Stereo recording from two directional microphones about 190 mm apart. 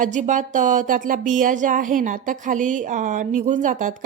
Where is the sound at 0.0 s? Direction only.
40° right (ahead or behind).